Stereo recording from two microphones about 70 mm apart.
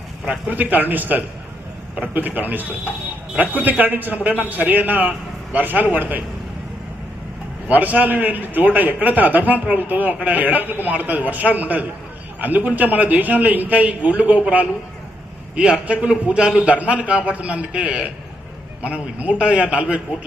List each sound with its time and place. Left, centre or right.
0.3 s a man's voice: right
7.7 s a man's voice: right